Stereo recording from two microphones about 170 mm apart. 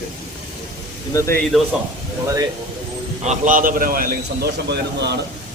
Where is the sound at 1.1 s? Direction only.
20° left (ahead or behind).